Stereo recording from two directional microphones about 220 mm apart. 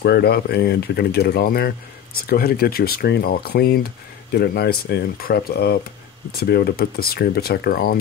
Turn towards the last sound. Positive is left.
turn(degrees=40)  # may be behind; listen again after turning